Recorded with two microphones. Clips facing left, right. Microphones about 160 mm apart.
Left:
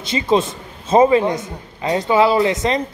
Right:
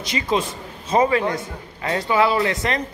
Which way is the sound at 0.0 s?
25° left (ahead or behind).